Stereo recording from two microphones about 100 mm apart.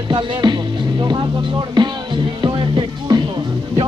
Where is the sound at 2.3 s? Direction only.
45° right (ahead or behind).